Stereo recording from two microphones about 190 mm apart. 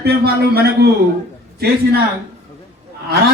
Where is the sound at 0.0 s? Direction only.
55° right (ahead or behind).